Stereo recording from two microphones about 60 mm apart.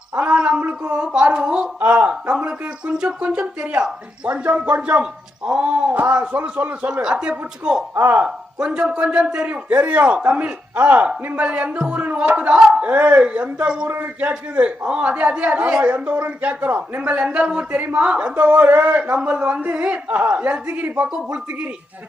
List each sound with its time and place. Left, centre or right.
0.2 s gargling: centre
0.9 s a man's voice: centre
1.8 s a sound: right
2.4 s speech: centre
6.3 s speech: right
7.0 s a man's voice: centre
7.9 s speech: right
8.2 s a man's voice: centre
9.5 s speech: right
13.8 s speech: right
14.3 s speech: right
17.0 s speech: centre